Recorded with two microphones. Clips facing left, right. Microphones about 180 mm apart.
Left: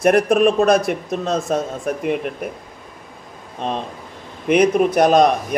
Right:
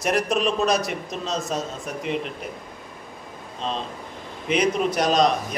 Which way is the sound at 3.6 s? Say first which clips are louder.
Left 4 dB; 55° left (ahead or behind).